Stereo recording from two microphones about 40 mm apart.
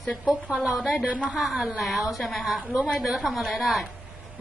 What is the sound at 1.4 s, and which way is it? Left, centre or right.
A woman's voice, centre.